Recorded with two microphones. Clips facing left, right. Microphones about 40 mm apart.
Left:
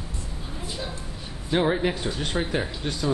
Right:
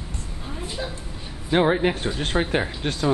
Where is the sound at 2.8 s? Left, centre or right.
Right.